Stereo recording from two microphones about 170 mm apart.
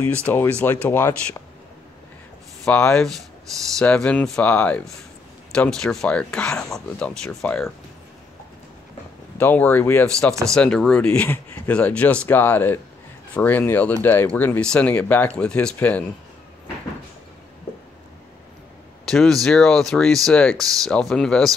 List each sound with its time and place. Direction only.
0.3 s speech: 10° left (ahead or behind)
2.6 s speech: 5° left (ahead or behind)
9.4 s speech: 10° left (ahead or behind)
19.0 s speech: centre (ahead or behind)